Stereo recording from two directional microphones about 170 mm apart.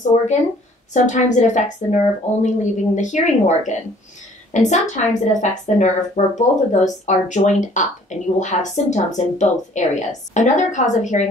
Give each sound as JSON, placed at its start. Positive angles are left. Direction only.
{"t": 0.9, "sound": "a woman's voice", "side_deg": 45}